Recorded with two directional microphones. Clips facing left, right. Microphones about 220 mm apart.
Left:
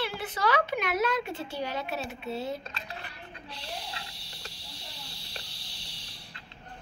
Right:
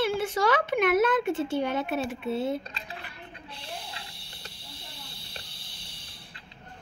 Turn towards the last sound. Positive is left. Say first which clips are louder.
# even
turn(degrees=-55)  # may be behind; listen again after turning